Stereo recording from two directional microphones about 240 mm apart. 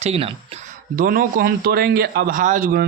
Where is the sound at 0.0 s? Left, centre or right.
Right.